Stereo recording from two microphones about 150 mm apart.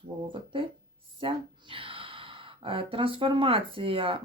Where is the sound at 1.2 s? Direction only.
35° right (ahead or behind).